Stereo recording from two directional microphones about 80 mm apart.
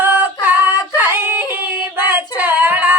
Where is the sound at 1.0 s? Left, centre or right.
Right.